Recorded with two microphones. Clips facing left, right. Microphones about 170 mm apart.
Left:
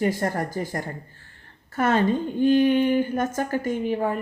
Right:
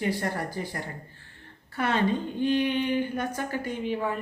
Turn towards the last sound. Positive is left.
turn(degrees=45)  # may be behind; listen again after turning